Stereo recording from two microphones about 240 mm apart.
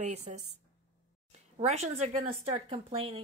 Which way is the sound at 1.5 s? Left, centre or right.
Right.